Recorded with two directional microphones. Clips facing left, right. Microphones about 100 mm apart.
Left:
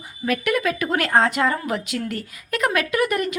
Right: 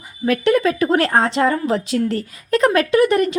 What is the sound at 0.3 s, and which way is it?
Speech, 30° right (ahead or behind).